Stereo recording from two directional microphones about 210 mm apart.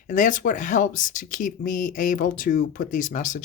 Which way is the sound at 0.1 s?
40° left (ahead or behind).